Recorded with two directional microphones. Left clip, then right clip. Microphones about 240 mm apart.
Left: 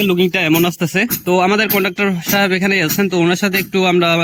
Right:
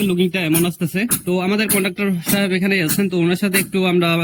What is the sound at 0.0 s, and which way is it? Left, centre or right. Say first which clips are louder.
A man's voice: left 5 dB; centre.